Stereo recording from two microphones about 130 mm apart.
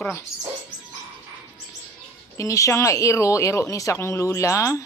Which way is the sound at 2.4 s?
25° left (ahead or behind).